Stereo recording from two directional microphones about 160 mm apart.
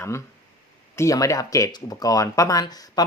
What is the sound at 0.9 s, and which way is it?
Speech, 20° left (ahead or behind).